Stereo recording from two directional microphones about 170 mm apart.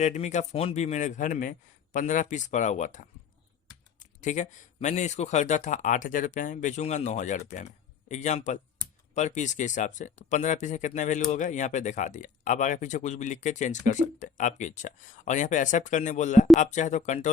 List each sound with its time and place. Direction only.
0.0 s speech: 45° left (ahead or behind)